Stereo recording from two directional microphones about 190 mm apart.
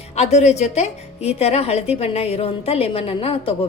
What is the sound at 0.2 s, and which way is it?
A woman's voice, 35° left (ahead or behind).